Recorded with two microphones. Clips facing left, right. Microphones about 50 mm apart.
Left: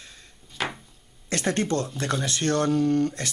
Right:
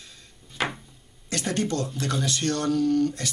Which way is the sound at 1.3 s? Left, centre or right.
Left.